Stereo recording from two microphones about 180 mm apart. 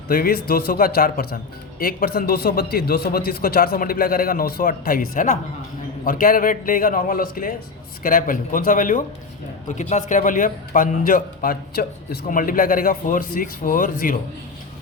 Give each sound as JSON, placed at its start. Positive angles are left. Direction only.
{"t": 0.1, "sound": "a man's voice", "side_deg": 55}